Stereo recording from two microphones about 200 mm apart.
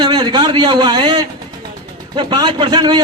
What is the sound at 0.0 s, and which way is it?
A man's voice, 20° right (ahead or behind).